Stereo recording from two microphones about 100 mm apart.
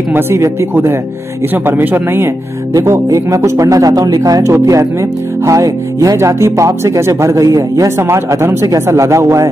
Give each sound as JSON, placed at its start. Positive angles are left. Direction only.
{"t": 0.1, "sound": "speech", "side_deg": -25}